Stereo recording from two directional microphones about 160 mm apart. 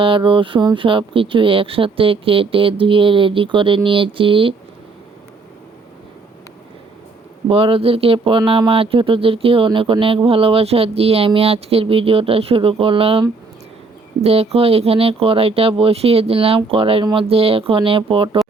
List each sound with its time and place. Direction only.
0.0 s speech: 35° right (ahead or behind)
7.4 s speech: 35° right (ahead or behind)